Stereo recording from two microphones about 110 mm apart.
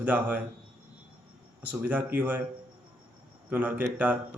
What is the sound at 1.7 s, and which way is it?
Speech, 15° right (ahead or behind).